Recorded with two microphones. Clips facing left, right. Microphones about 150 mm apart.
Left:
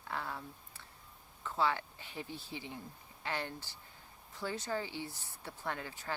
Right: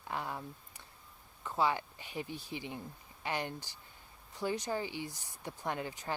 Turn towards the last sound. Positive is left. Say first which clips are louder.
# right 3 dB
turn(degrees=-20)  # may be behind; listen again after turning